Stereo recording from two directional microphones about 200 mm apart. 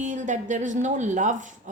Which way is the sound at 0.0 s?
40° right (ahead or behind).